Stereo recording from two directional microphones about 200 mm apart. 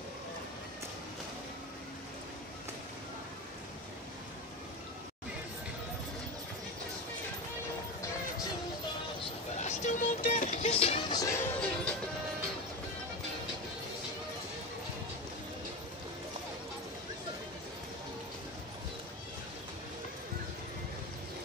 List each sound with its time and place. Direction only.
9.6 s music: 35° left (ahead or behind); by 11.9 s 15° left (ahead or behind)